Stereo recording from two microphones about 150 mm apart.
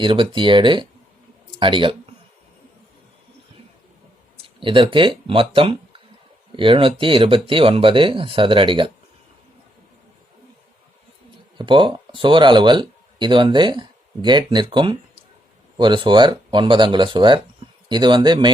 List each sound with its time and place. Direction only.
0.0 s speech: 35° right (ahead or behind)
4.4 s speech: 35° right (ahead or behind)
11.5 s speech: 30° right (ahead or behind)